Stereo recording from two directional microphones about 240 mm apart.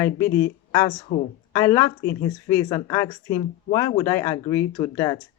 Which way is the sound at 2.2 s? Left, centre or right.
Centre.